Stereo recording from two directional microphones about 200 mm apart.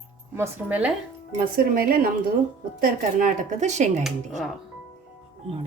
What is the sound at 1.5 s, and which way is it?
A woman's voice, 50° right (ahead or behind).